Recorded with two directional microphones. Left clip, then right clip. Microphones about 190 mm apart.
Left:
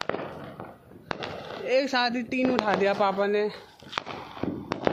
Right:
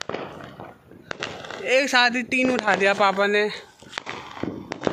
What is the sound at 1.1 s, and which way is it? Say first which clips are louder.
Fireworks: right 2 dB; 55° left (ahead or behind).